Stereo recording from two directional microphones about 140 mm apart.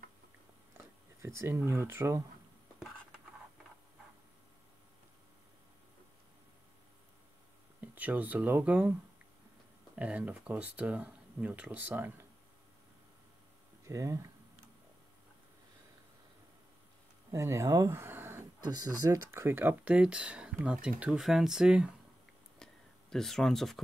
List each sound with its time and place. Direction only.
0.7 s speech: 20° right (ahead or behind)
7.8 s speech: 15° right (ahead or behind)
9.9 s speech: 10° right (ahead or behind)
13.8 s speech: 20° right (ahead or behind)
17.3 s speech: 20° right (ahead or behind)
18.6 s speech: 30° right (ahead or behind); by 21.9 s 5° right (ahead or behind)
22.6 s a sound: 5° left (ahead or behind)